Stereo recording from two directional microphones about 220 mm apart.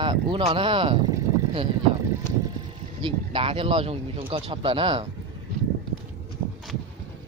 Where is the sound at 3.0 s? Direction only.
25° right (ahead or behind).